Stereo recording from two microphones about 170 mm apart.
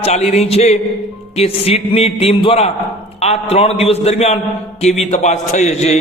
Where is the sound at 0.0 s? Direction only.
40° left (ahead or behind).